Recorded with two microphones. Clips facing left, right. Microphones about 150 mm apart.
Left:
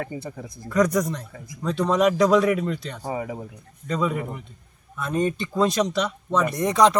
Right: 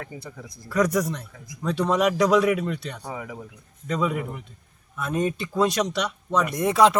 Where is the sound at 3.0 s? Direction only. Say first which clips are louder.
Left 5 dB; 25° left (ahead or behind).